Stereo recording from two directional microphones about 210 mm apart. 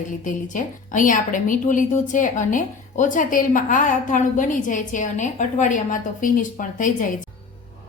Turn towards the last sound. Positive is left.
turn(degrees=40)  # may be behind; listen again after turning